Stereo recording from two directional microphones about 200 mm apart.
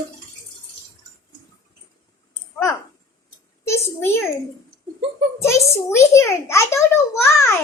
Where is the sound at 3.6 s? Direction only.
15° left (ahead or behind).